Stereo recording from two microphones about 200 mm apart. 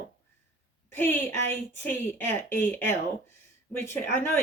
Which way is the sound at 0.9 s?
10° left (ahead or behind).